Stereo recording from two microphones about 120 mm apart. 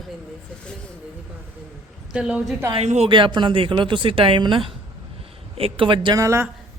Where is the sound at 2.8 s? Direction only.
65° right (ahead or behind).